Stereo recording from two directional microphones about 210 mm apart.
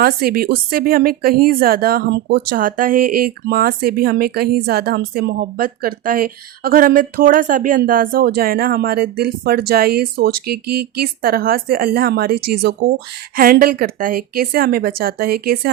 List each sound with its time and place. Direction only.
0.0 s speech: 45° right (ahead or behind)